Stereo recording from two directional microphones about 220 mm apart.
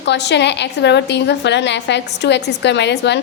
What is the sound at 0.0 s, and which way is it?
A woman's voice, 50° left (ahead or behind).